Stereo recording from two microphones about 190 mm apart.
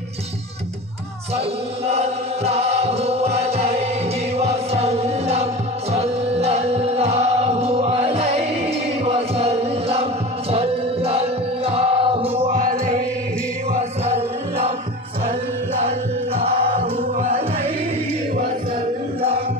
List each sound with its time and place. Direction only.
1.9 s music: 35° right (ahead or behind)
12.5 s music: 40° right (ahead or behind)
16.3 s music: 30° right (ahead or behind)